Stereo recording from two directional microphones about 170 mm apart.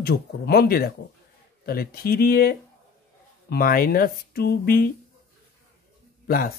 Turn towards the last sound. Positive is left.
turn(degrees=60)  # may be behind; listen again after turning